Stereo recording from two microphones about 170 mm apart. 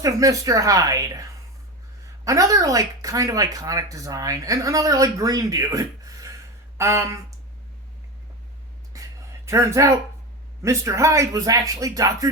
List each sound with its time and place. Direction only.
0.0 s speech: 20° right (ahead or behind)
8.9 s a sound: 20° right (ahead or behind)
9.5 s speech: 15° right (ahead or behind)